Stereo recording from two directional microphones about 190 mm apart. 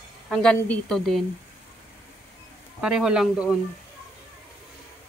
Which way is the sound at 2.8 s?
5° right (ahead or behind).